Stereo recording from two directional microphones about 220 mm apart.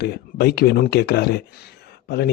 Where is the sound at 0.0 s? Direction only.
45° left (ahead or behind).